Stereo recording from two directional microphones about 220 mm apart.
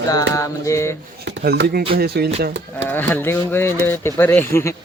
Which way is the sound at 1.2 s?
50° right (ahead or behind).